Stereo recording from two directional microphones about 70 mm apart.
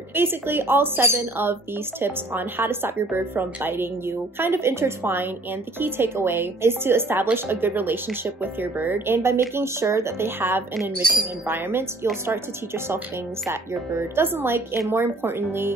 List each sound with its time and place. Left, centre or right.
0.1 s a woman's voice: right